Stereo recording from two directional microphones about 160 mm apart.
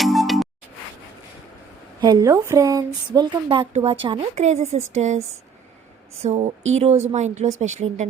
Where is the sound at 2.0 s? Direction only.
20° right (ahead or behind); by 8.0 s 45° right (ahead or behind).